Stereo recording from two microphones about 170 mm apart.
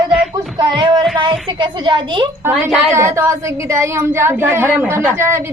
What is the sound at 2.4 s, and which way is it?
Speech, 10° right (ahead or behind).